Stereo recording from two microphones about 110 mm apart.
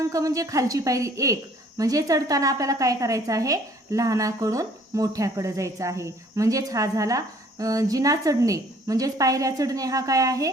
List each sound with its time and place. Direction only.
0.1 s a woman's voice: 30° right (ahead or behind)